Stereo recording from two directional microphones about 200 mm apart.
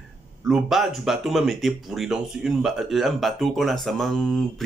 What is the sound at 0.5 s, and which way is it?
Speech, centre (ahead or behind).